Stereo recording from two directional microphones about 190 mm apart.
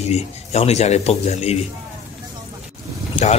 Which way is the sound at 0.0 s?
35° left (ahead or behind).